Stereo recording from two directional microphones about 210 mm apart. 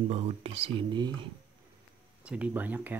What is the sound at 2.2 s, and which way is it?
Speech, 5° right (ahead or behind).